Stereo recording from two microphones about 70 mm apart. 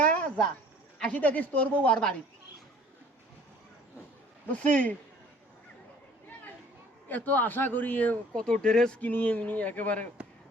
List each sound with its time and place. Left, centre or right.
0.1 s a sound: centre
1.0 s a man's voice: left
4.4 s a man's voice: left
7.1 s a man's voice: left
8.4 s speech: centre
9.0 s a man's voice: left